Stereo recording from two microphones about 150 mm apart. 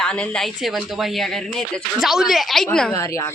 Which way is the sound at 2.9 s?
20° left (ahead or behind).